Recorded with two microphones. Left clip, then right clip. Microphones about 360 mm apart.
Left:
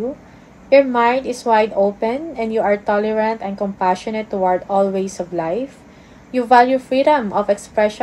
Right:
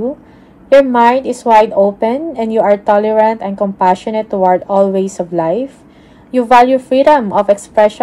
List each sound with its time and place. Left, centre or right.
0.7 s a woman's voice: centre